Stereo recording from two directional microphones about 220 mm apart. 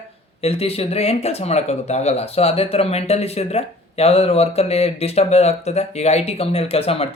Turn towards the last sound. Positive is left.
turn(degrees=25)  # may be behind; listen again after turning